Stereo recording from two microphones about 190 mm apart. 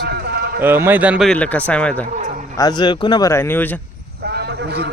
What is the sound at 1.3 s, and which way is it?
Speech, 5° left (ahead or behind).